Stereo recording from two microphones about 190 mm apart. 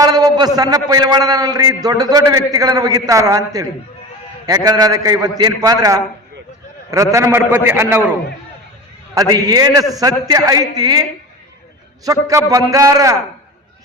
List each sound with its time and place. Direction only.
0.0 s a man's voice: 20° right (ahead or behind)
9.1 s a man's voice: 20° right (ahead or behind)
12.0 s a man's voice: 15° right (ahead or behind)